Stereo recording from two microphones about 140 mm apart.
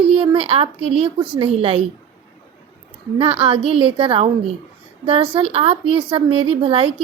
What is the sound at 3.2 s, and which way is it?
A woman's voice, 40° right (ahead or behind).